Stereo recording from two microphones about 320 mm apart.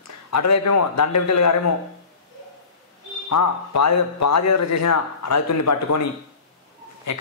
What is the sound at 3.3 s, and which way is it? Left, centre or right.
Speech, left.